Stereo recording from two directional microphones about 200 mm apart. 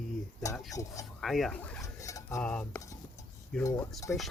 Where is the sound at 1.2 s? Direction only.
Centre (ahead or behind).